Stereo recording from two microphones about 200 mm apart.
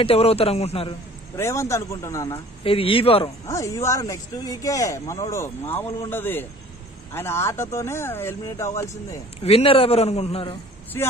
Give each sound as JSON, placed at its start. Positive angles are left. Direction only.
{"t": 0.0, "sound": "a man's voice", "side_deg": 30}
{"t": 1.3, "sound": "speech", "side_deg": 15}
{"t": 2.6, "sound": "a man's voice", "side_deg": 25}
{"t": 3.4, "sound": "speech", "side_deg": 15}
{"t": 9.4, "sound": "a man's voice", "side_deg": 30}